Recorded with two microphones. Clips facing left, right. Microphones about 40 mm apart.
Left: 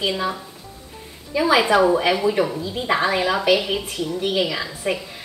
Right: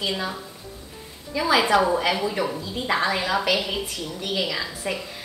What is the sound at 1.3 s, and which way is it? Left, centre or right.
A woman's voice, centre.